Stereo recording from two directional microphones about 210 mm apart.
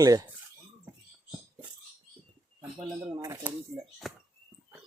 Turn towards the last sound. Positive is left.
turn(degrees=0)  # may be behind; listen again after turning